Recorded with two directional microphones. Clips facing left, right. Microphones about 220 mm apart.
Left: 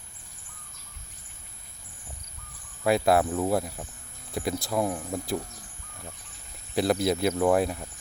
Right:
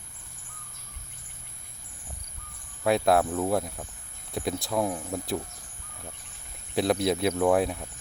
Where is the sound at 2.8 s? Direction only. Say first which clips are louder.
Even; centre (ahead or behind).